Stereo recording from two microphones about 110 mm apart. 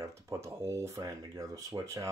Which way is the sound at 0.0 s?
25° right (ahead or behind).